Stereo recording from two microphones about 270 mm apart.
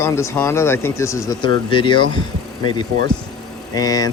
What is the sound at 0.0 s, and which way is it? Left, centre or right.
Speech, centre.